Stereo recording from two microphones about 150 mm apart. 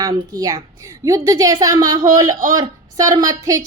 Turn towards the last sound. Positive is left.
turn(degrees=-25)  # may be behind; listen again after turning